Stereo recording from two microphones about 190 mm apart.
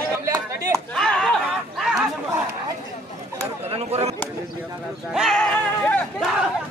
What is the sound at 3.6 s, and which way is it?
Speech, 30° right (ahead or behind).